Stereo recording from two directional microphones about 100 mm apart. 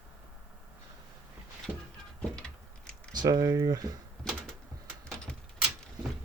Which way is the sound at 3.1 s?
40° right (ahead or behind).